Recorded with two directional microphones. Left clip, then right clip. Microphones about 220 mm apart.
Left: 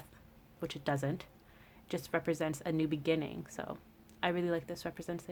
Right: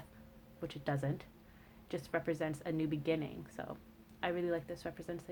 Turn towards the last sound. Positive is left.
turn(degrees=30)  # may be behind; listen again after turning